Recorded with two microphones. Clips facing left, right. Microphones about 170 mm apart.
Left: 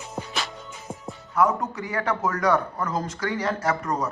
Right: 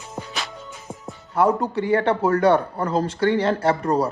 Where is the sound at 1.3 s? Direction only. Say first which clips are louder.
Right 3 dB; 30° right (ahead or behind).